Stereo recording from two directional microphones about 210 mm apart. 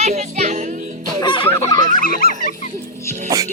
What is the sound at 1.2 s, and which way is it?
Music, 20° left (ahead or behind).